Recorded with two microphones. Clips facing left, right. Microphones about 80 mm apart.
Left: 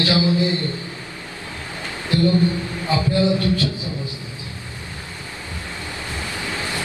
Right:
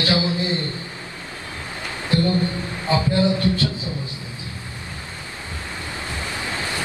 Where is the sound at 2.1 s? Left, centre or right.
Right.